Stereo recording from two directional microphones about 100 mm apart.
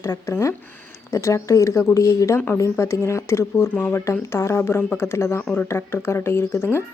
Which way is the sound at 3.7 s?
15° left (ahead or behind).